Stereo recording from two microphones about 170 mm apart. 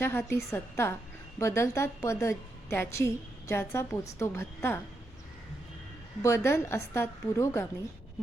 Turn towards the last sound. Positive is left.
turn(degrees=15)  # may be behind; listen again after turning